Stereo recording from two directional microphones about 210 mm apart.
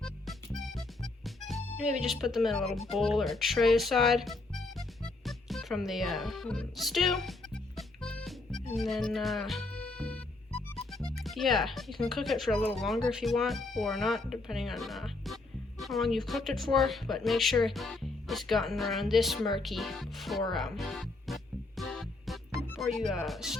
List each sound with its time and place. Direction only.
0.7 s speech: centre (ahead or behind)
7.8 s music: centre (ahead or behind)
10.8 s a woman's voice: centre (ahead or behind)
20.5 s music: centre (ahead or behind)
22.8 s a woman's voice: centre (ahead or behind)